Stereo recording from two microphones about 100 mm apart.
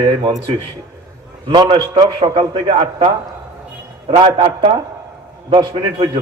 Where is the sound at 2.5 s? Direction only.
65° right (ahead or behind).